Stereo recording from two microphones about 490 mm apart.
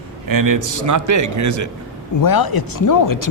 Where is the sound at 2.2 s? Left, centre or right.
Left.